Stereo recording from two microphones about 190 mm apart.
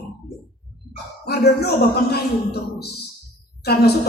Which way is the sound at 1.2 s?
55° left (ahead or behind).